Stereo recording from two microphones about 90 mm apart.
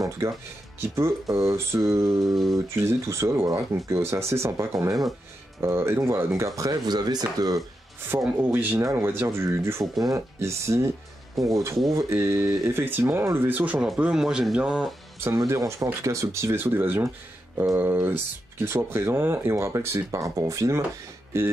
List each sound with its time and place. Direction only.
0.2 s speech: 30° right (ahead or behind)
5.6 s speech: 25° right (ahead or behind); by 7.5 s 45° right (ahead or behind)
8.2 s speech: 10° right (ahead or behind)
8.5 s speech: 20° right (ahead or behind)
11.4 s speech: centre (ahead or behind)
11.9 s speech: 30° right (ahead or behind); by 14.9 s 10° right (ahead or behind)
15.4 s speech: 35° right (ahead or behind)